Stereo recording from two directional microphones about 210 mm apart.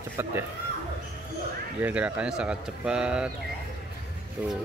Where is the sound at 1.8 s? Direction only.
5° right (ahead or behind).